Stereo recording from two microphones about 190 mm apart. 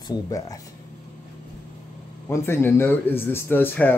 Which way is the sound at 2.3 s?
10° left (ahead or behind).